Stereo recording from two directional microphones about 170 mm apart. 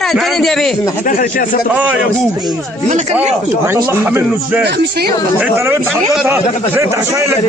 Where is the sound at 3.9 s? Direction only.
10° right (ahead or behind).